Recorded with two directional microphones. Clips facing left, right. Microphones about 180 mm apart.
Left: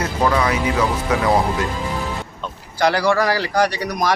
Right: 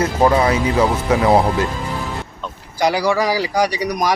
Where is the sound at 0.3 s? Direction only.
30° right (ahead or behind).